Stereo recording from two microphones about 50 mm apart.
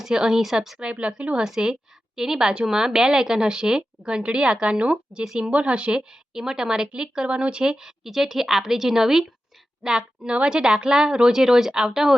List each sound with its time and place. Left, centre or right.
0.0 s a woman's voice: centre
1.5 s a woman's voice: centre